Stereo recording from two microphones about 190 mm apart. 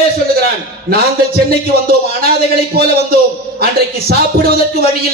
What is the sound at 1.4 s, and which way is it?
Speech, 55° right (ahead or behind).